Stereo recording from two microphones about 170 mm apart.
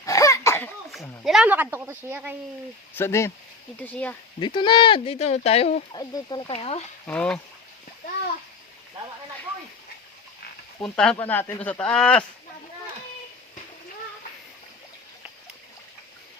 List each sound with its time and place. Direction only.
0.0 s a sound: 20° left (ahead or behind)
1.2 s a woman's voice: centre (ahead or behind)
2.9 s speech: 15° left (ahead or behind)
4.4 s speech: 30° left (ahead or behind)
5.9 s speech: 25° left (ahead or behind)
7.1 s speech: 5° left (ahead or behind)
10.8 s speech: 5° left (ahead or behind)